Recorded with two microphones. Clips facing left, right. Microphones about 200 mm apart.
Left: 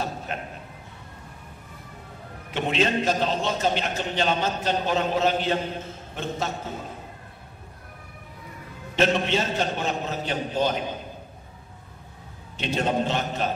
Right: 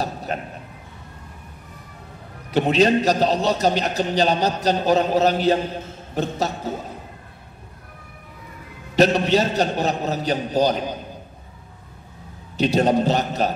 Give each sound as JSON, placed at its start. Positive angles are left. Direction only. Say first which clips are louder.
{"t": 0.3, "sound": "a man's voice", "louder": "right 5 dB", "side_deg": -40}
{"t": 2.5, "sound": "a man's voice", "louder": "right 7 dB", "side_deg": -40}
{"t": 8.9, "sound": "a man's voice", "louder": "right 6 dB", "side_deg": -40}
{"t": 12.5, "sound": "a man's voice", "louder": "right 7 dB", "side_deg": -40}